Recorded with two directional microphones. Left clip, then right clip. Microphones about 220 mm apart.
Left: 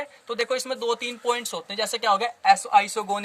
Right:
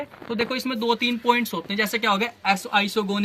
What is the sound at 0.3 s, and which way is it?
Speech, 45° left (ahead or behind).